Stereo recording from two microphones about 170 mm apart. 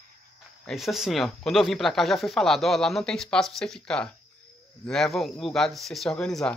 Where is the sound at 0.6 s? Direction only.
Centre (ahead or behind).